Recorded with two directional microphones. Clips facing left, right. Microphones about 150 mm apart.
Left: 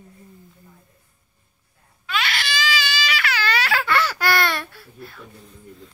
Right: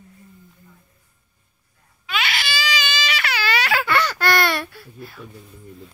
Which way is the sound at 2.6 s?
20° right (ahead or behind).